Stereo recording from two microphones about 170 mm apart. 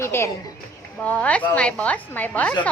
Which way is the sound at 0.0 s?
15° left (ahead or behind).